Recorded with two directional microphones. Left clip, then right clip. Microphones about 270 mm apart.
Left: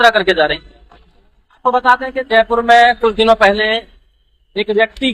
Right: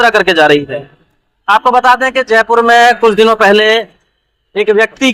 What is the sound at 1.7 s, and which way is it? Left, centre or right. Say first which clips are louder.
Mantra: right 5 dB; right.